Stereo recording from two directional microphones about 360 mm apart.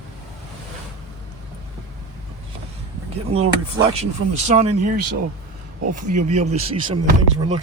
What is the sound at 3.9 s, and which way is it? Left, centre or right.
Speech, centre.